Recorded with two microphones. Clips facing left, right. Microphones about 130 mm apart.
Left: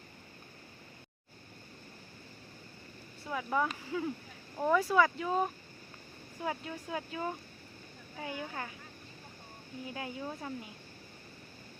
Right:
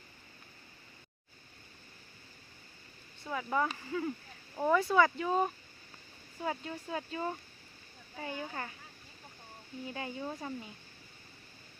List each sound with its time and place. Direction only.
3.2 s speech: centre (ahead or behind)
9.9 s speech: centre (ahead or behind)